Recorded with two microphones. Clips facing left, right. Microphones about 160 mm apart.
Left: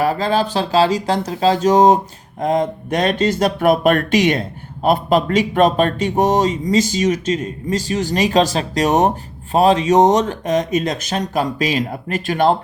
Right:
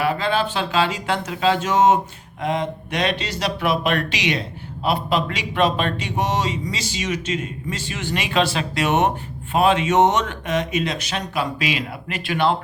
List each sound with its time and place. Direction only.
0.0 s speech: 40° left (ahead or behind)